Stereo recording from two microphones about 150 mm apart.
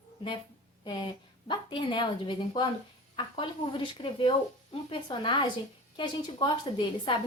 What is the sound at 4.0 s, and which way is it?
A woman's voice, 35° left (ahead or behind).